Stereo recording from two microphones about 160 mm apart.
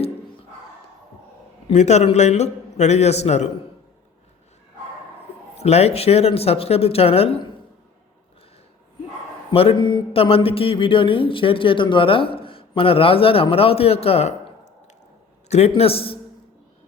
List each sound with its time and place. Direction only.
1.7 s a man's voice: 45° left (ahead or behind)
5.5 s speech: 40° left (ahead or behind)
9.5 s speech: 35° left (ahead or behind)
15.4 s speech: 40° left (ahead or behind)